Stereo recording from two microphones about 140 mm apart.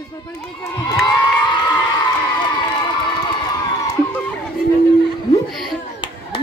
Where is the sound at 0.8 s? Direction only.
25° left (ahead or behind).